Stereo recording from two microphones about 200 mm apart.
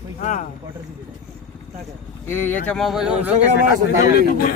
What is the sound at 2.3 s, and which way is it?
Speech, 10° left (ahead or behind).